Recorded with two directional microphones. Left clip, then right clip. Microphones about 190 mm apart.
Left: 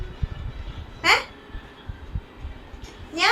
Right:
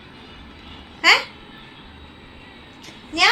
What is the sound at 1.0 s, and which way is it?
Speech, 50° right (ahead or behind).